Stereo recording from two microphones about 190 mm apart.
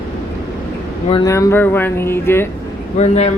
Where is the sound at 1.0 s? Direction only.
25° left (ahead or behind).